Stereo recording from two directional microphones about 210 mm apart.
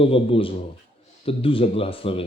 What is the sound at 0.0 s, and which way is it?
Speech, 25° left (ahead or behind).